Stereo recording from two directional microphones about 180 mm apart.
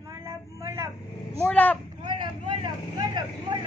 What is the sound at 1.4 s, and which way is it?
Vehicle, 10° left (ahead or behind).